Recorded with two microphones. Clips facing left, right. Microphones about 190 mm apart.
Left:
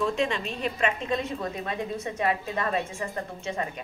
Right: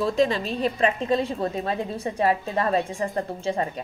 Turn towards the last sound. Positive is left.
turn(degrees=-35)  # may be behind; listen again after turning